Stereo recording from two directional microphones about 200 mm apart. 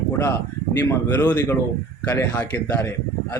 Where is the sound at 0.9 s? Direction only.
10° left (ahead or behind).